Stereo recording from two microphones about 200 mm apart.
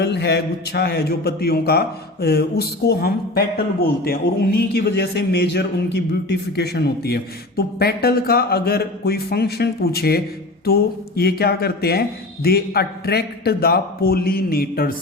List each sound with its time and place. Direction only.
0.0 s speech: 55° left (ahead or behind)